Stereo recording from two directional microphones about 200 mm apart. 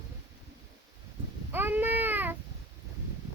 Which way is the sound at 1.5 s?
10° right (ahead or behind).